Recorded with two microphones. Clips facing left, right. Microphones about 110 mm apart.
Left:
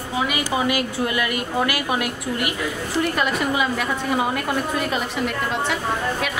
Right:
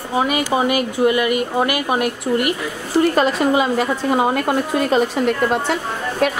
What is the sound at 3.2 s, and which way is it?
A woman's voice, 30° right (ahead or behind).